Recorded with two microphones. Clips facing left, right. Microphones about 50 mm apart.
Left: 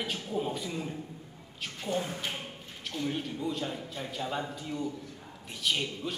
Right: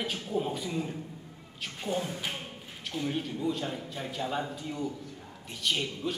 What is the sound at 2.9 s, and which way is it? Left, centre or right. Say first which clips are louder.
A man's voice: right 1 dB; centre.